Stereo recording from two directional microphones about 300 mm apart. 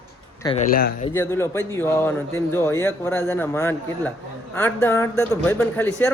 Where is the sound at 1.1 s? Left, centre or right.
Centre.